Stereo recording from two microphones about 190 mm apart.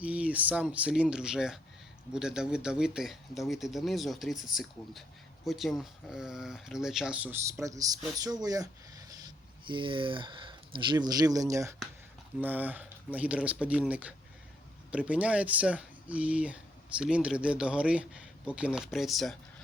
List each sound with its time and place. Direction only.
0.0 s speech: 5° right (ahead or behind)